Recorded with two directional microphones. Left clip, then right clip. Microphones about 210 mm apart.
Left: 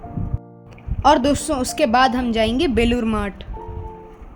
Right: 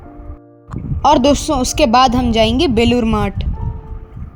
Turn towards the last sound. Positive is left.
turn(degrees=-20)  # may be behind; listen again after turning